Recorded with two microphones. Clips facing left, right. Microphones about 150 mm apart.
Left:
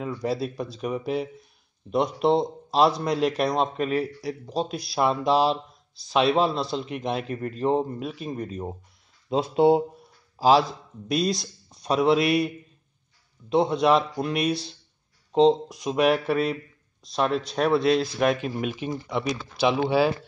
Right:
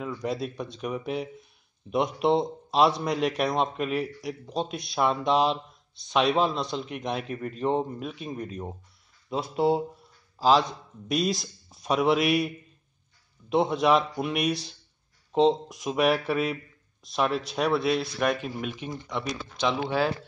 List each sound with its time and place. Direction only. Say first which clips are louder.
0.0 s speech: left 3 dB; centre (ahead or behind)
9.3 s speech: left 5 dB; 25° left (ahead or behind)
10.4 s speech: left 3 dB; 5° left (ahead or behind)